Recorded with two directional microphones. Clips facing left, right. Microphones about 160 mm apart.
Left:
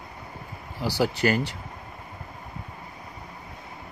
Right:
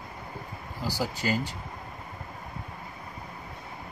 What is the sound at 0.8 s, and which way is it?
Speech, 70° left (ahead or behind).